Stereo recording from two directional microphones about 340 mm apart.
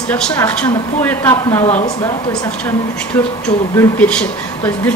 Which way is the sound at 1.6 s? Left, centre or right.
Centre.